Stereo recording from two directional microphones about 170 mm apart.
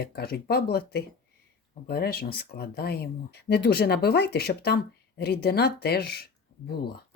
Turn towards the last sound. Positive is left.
turn(degrees=70)  # may be behind; listen again after turning